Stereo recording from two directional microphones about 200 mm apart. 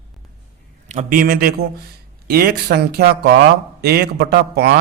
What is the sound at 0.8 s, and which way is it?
Speech, 35° right (ahead or behind).